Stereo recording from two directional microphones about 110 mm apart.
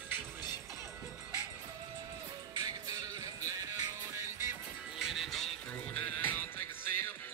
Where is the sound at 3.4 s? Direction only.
30° right (ahead or behind).